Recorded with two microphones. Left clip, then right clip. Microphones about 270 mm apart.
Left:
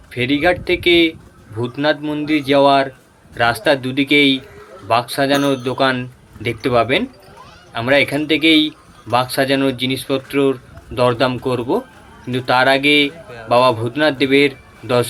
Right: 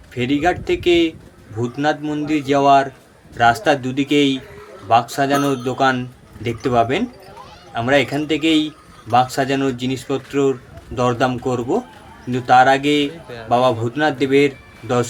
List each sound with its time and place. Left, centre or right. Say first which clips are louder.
0.1 s speech: left 2 dB; centre